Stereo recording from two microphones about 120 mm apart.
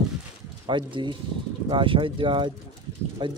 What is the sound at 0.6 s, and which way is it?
Speech, 40° right (ahead or behind).